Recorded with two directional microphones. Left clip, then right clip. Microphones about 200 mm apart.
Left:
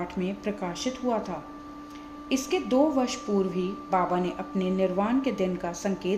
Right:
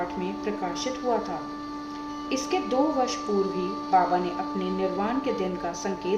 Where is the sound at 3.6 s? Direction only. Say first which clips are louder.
Right 4 dB; 40° left (ahead or behind).